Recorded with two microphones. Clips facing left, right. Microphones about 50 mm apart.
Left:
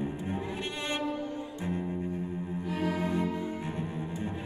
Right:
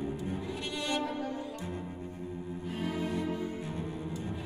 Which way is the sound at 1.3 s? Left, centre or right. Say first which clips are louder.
Left 2 dB; left.